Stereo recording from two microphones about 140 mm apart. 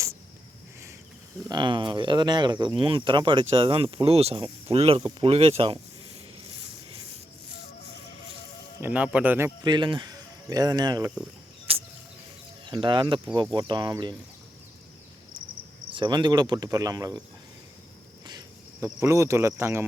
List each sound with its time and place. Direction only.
1.5 s speech: 35° right (ahead or behind)
8.8 s speech: 10° right (ahead or behind)
9.6 s speech: 30° right (ahead or behind)
11.7 s a sound: 45° right (ahead or behind)
12.6 s speech: 35° right (ahead or behind)
15.9 s speech: 35° right (ahead or behind)
18.3 s cricket: 30° right (ahead or behind)
18.9 s speech: 20° right (ahead or behind)